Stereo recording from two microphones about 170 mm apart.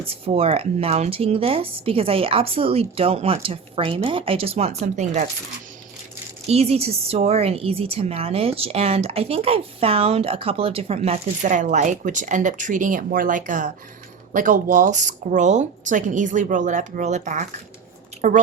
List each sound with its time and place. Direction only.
0.1 s a woman's voice: 35° right (ahead or behind)
6.5 s a woman's voice: 35° right (ahead or behind)